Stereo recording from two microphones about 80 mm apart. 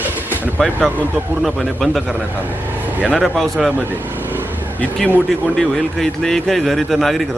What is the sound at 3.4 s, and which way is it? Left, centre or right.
Speech, centre.